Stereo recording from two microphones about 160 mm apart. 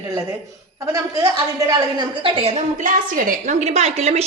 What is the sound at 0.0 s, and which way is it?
A woman's voice, 20° right (ahead or behind).